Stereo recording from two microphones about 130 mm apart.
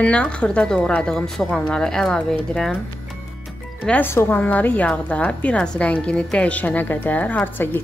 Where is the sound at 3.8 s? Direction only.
15° left (ahead or behind).